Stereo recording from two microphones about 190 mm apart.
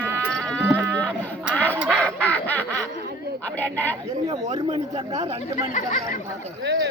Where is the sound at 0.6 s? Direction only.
10° right (ahead or behind).